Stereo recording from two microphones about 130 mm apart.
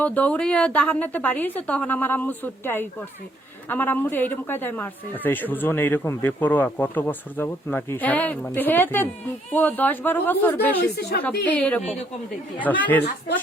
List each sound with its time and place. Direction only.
0.0 s a man's voice: 10° left (ahead or behind)
11.8 s a woman's voice: 60° left (ahead or behind)
12.5 s a man's voice: 10° left (ahead or behind)